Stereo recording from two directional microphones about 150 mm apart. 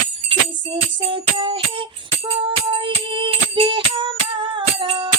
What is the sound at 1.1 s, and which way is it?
Music, 35° right (ahead or behind).